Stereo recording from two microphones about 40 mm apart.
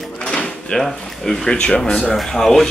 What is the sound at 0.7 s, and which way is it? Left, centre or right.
Speech, centre.